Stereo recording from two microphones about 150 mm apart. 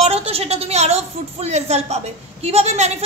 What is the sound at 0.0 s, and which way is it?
A woman's voice, 40° right (ahead or behind).